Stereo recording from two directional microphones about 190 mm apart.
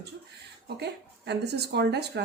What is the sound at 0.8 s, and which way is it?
A woman's voice, 60° right (ahead or behind).